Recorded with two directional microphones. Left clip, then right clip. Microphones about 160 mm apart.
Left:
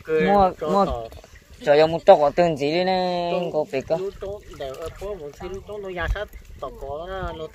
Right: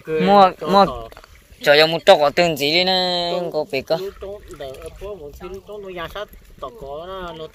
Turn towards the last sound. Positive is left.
turn(degrees=-15)  # may be behind; listen again after turning